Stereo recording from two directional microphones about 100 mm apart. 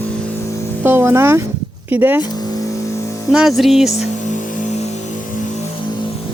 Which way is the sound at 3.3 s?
5° right (ahead or behind).